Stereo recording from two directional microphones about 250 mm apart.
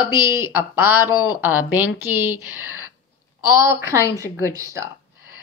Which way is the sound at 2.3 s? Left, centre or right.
Left.